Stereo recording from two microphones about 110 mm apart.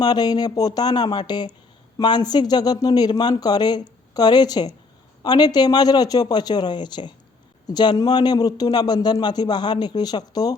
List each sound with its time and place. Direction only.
0.0 s a man's voice: 40° left (ahead or behind)